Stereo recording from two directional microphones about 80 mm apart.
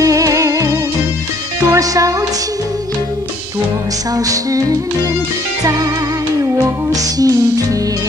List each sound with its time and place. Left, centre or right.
0.0 s music: right
4.3 s music: right
6.9 s music: right